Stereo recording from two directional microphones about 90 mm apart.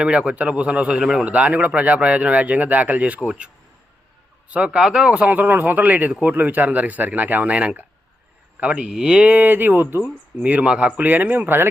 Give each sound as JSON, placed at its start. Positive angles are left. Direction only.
{"t": 0.0, "sound": "speech", "side_deg": -10}
{"t": 4.5, "sound": "speech", "side_deg": -10}